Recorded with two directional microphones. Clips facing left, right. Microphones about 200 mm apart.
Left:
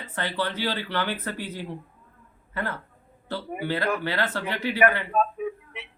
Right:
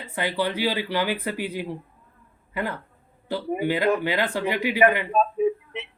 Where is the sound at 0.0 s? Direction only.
15° right (ahead or behind).